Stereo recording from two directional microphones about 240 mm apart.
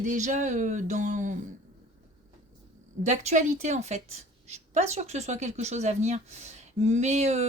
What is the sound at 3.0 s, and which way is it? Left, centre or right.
A woman's voice, right.